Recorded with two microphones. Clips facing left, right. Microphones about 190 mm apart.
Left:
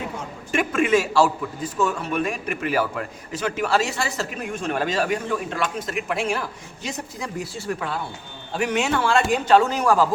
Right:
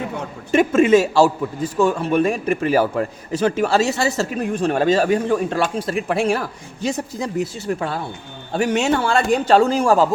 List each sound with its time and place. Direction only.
0.5 s a man's voice: 25° right (ahead or behind)